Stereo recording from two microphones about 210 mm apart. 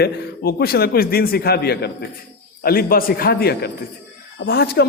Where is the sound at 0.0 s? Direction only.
50° left (ahead or behind).